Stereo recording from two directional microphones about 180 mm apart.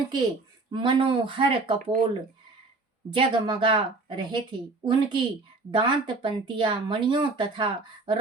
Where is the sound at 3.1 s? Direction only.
25° right (ahead or behind).